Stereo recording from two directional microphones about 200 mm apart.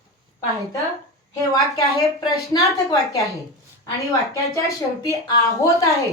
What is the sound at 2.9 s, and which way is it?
A woman's voice, 15° left (ahead or behind).